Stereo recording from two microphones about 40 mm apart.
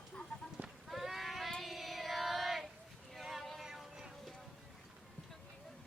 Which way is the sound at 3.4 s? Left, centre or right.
Centre.